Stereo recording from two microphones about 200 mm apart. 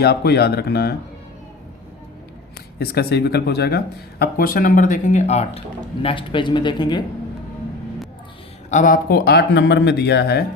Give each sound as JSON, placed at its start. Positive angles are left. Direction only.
{"t": 0.0, "sound": "speech", "side_deg": 55}
{"t": 2.7, "sound": "speech", "side_deg": 50}
{"t": 8.7, "sound": "speech", "side_deg": 40}